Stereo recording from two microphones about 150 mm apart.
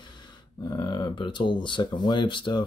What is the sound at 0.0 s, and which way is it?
Speech, 30° left (ahead or behind).